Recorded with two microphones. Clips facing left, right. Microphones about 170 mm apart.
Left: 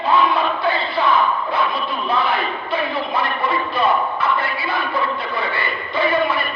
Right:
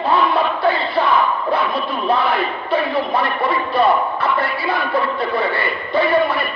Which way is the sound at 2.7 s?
35° right (ahead or behind).